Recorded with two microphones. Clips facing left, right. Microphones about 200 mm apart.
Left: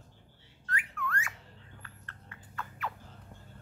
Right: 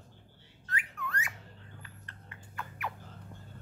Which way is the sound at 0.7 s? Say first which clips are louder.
Left 2 dB; 20° right (ahead or behind).